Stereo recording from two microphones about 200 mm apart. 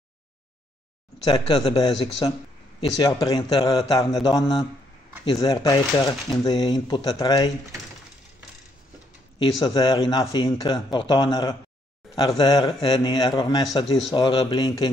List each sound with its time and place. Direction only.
1.2 s a man's voice: 30° left (ahead or behind)
9.4 s a man's voice: 20° left (ahead or behind)